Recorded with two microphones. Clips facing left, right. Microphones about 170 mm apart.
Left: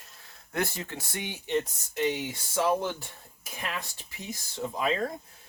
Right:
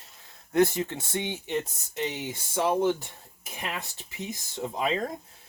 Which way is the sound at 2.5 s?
20° right (ahead or behind).